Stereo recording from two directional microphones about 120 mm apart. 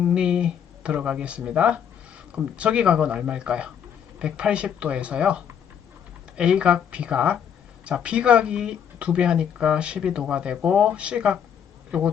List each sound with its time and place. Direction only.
0.0 s speech: 10° right (ahead or behind)